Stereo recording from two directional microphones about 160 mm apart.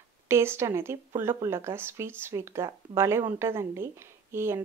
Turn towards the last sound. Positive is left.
turn(degrees=-15)  # may be behind; listen again after turning